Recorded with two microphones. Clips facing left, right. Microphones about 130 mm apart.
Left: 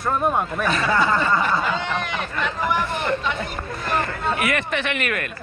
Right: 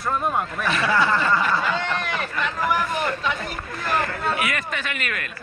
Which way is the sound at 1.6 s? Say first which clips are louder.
Left 1 dB; centre (ahead or behind).